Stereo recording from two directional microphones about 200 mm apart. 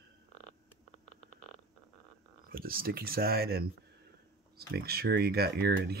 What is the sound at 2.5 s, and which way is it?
Speech, 45° right (ahead or behind).